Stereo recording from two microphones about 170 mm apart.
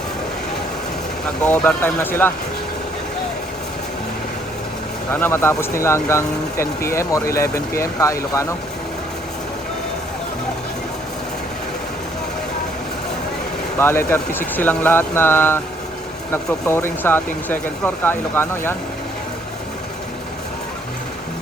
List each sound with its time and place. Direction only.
1.5 s speech: 10° left (ahead or behind)
5.1 s speech: 10° left (ahead or behind)
13.7 s speech: 15° left (ahead or behind)